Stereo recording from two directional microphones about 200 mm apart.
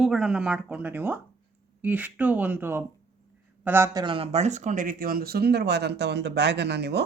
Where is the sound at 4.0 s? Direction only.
25° right (ahead or behind).